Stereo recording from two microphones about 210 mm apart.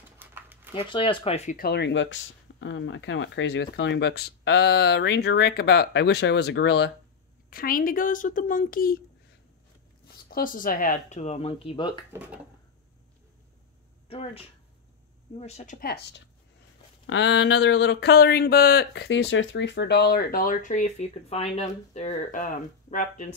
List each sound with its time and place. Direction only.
0.2 s a sound: 10° right (ahead or behind)
0.7 s speech: 25° left (ahead or behind)
1.6 s speech: 55° left (ahead or behind)
7.4 s speech: 45° left (ahead or behind)
10.3 s speech: 40° left (ahead or behind); by 12.0 s 20° left (ahead or behind)
12.1 s speech: 10° right (ahead or behind)
14.0 s speech: 30° left (ahead or behind); by 16.2 s 45° left (ahead or behind)
17.0 s speech: 60° left (ahead or behind); by 23.3 s 35° left (ahead or behind)